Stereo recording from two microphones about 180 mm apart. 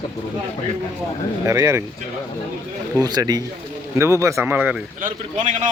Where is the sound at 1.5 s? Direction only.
15° right (ahead or behind).